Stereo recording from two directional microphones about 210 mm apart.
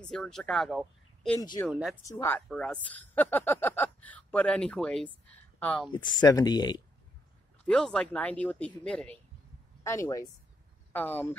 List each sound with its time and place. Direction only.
0.0 s speech: 5° left (ahead or behind)
1.4 s speech: 20° left (ahead or behind)
1.7 s speech: centre (ahead or behind)
2.0 s speech: 15° left (ahead or behind)
6.2 s speech: 20° left (ahead or behind)
7.6 s speech: 5° left (ahead or behind)